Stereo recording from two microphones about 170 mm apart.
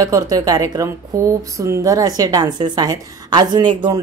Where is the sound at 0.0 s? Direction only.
20° right (ahead or behind).